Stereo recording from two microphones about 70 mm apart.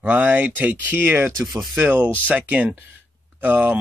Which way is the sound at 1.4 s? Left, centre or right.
Right.